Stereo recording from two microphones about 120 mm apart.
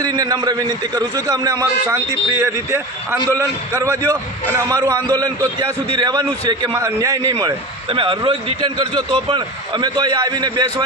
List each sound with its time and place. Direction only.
0.0 s a man's voice: 30° right (ahead or behind)
7.9 s speech: 45° right (ahead or behind)